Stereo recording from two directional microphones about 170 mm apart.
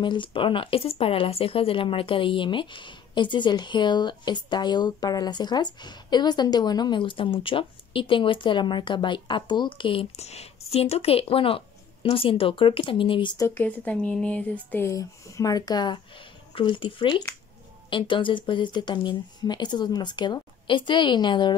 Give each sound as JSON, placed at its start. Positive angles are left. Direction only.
{"t": 0.0, "sound": "speech", "side_deg": 30}
{"t": 13.4, "sound": "speech", "side_deg": 10}